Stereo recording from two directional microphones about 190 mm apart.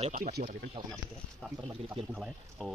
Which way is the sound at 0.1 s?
45° right (ahead or behind).